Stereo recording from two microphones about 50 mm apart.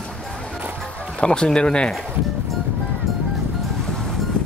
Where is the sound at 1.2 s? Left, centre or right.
Centre.